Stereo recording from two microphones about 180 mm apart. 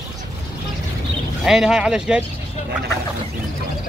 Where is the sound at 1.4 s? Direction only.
5° right (ahead or behind).